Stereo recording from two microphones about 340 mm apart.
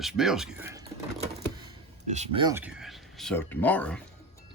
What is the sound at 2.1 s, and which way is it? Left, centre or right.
Speech, centre.